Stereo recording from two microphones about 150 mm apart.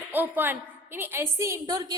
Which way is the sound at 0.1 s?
10° right (ahead or behind).